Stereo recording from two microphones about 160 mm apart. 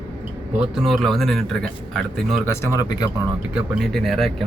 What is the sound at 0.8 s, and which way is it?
Speech, centre (ahead or behind).